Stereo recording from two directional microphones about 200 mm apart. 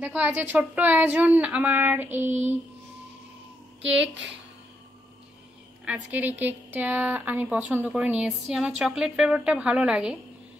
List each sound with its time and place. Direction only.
0.0 s a woman's voice: 10° right (ahead or behind)
2.2 s child singing: 35° right (ahead or behind)
5.9 s a woman's voice: 10° right (ahead or behind)